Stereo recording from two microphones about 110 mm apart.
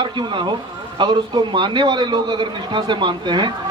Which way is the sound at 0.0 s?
45° right (ahead or behind).